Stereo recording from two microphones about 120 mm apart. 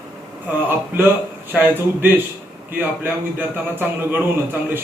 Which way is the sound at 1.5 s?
15° right (ahead or behind).